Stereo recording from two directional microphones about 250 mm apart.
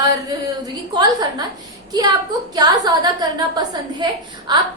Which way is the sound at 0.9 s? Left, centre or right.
Centre.